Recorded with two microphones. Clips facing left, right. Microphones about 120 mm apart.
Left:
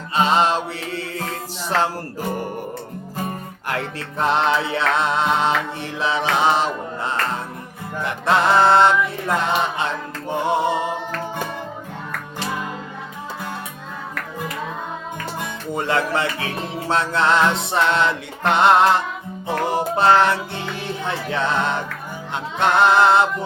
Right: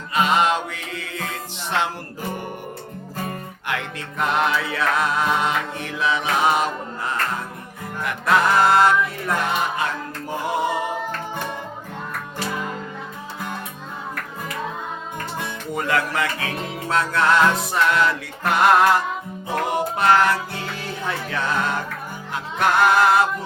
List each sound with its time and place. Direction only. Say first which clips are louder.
0.1 s music: left 1 dB; 30° left (ahead or behind)
3.7 s music: left 2 dB; 35° left (ahead or behind)
15.7 s music: left 2 dB; 25° left (ahead or behind)